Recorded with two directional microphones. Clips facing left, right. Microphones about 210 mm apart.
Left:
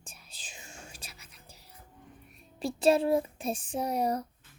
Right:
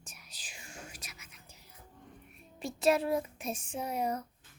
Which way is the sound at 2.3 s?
30° left (ahead or behind).